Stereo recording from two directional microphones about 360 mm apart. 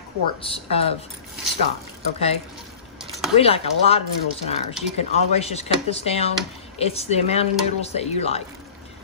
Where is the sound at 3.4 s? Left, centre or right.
Centre.